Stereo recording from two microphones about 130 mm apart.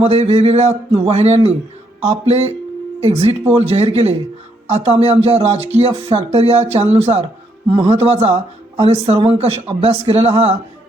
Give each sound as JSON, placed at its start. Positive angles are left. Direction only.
{"t": 0.0, "sound": "speech", "side_deg": -55}